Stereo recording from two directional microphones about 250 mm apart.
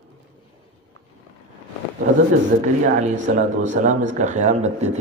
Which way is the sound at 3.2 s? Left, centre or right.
Right.